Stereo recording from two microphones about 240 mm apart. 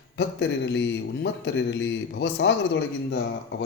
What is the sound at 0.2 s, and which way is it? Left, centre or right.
Speech, left.